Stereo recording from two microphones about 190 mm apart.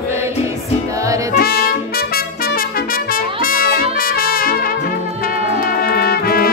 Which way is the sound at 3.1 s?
50° left (ahead or behind).